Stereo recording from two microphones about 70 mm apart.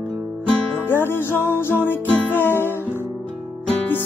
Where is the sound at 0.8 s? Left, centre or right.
Left.